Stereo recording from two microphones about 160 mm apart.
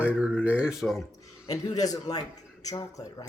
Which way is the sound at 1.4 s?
25° left (ahead or behind).